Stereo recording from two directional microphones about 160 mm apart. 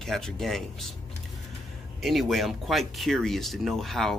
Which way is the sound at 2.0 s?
Centre (ahead or behind).